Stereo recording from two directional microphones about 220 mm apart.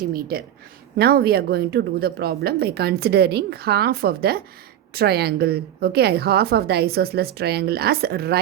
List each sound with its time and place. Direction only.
0.0 s speech: 45° right (ahead or behind)